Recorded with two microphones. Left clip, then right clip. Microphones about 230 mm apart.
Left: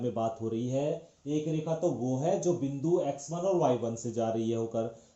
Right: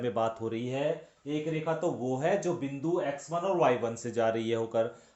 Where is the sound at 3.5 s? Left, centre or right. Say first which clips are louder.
Right 3 dB; right.